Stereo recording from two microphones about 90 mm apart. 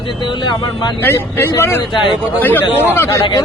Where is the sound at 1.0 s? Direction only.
25° left (ahead or behind).